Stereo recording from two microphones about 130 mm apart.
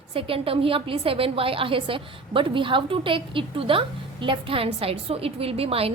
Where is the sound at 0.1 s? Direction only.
45° right (ahead or behind).